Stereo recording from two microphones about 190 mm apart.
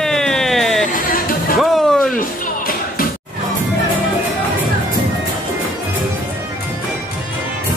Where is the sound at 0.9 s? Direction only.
45° left (ahead or behind).